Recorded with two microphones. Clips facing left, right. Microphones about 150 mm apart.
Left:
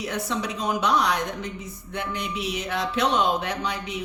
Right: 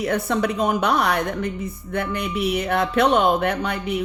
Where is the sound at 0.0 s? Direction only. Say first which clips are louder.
Right 7 dB; 55° right (ahead or behind).